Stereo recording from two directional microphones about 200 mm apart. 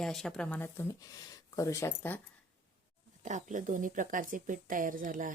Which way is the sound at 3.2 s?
40° right (ahead or behind).